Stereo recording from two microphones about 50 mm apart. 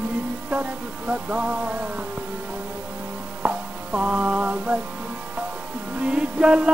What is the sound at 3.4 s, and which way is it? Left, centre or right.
Music, right.